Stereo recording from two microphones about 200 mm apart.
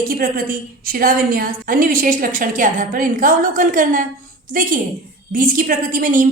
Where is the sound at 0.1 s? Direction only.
45° right (ahead or behind).